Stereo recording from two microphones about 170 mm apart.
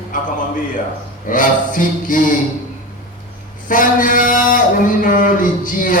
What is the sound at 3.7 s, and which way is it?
A man's voice, 50° left (ahead or behind).